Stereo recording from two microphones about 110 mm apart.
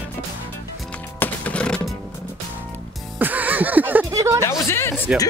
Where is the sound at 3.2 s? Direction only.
15° right (ahead or behind).